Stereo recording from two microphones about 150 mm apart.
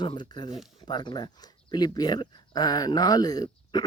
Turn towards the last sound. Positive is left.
turn(degrees=30)  # may be behind; listen again after turning